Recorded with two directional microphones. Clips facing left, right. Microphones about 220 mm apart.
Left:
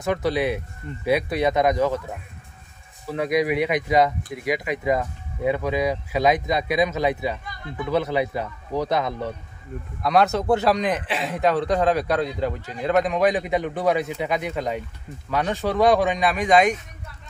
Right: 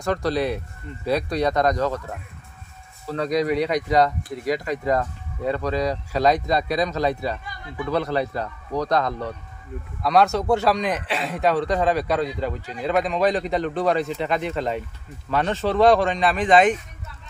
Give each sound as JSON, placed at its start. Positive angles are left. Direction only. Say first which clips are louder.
{"t": 0.0, "sound": "speech", "louder": "even", "side_deg": 5}
{"t": 3.1, "sound": "a man's voice", "louder": "even", "side_deg": 5}
{"t": 6.8, "sound": "a man's voice", "louder": "left 1 dB", "side_deg": 20}